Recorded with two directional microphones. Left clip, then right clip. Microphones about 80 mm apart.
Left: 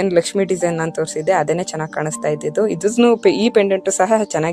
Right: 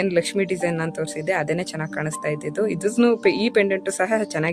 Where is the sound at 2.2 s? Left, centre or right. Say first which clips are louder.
Left 6 dB; left.